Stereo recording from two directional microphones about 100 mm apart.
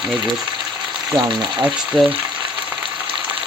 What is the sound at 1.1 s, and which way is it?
Frying, 50° right (ahead or behind).